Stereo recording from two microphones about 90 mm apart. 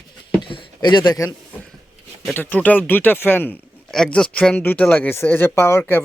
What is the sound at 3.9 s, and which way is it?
Speech, 10° left (ahead or behind).